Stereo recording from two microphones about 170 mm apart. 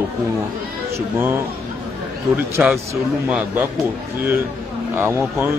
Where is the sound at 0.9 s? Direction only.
15° right (ahead or behind).